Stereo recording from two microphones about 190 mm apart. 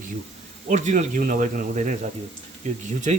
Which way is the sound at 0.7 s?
40° right (ahead or behind).